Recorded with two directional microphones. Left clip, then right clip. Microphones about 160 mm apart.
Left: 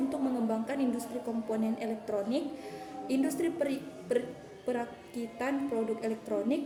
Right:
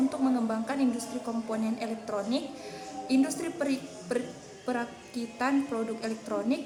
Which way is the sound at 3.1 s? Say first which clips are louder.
Right 2 dB; 15° left (ahead or behind).